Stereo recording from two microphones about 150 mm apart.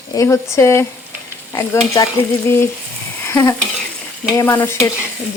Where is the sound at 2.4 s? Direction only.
15° left (ahead or behind).